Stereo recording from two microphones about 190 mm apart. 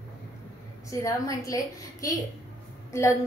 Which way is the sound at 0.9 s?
15° left (ahead or behind).